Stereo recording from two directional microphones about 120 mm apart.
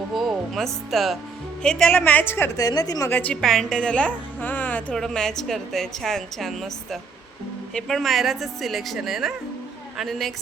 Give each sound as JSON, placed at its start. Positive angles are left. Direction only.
{"t": 0.1, "sound": "a woman's voice", "side_deg": 0}
{"t": 2.6, "sound": "a woman's voice", "side_deg": 30}
{"t": 3.1, "sound": "a woman's voice", "side_deg": 15}
{"t": 3.4, "sound": "a woman's voice", "side_deg": 5}
{"t": 4.4, "sound": "a sound", "side_deg": 15}
{"t": 4.9, "sound": "a woman's voice", "side_deg": 5}